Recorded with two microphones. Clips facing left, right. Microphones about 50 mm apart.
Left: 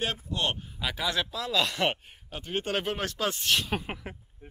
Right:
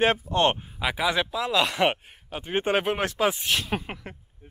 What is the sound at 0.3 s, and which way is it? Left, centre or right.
Speech, right.